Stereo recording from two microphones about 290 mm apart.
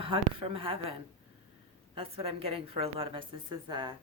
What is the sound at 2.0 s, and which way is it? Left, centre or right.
A woman's voice, centre.